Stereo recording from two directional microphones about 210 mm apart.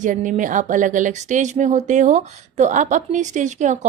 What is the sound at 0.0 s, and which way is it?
A woman's voice, 35° right (ahead or behind).